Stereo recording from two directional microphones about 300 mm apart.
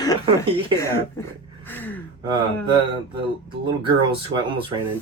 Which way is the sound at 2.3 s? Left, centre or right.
Centre.